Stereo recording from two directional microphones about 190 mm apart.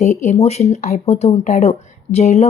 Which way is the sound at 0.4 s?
35° left (ahead or behind).